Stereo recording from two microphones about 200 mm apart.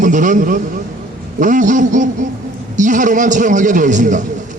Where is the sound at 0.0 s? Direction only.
40° right (ahead or behind).